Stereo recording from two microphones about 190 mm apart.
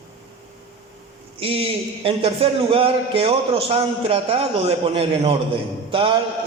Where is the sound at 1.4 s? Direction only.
30° right (ahead or behind).